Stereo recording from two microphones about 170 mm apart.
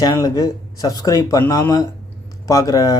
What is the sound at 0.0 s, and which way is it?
Speech, 20° left (ahead or behind).